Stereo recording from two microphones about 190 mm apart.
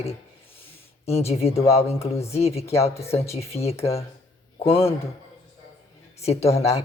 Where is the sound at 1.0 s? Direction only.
35° left (ahead or behind).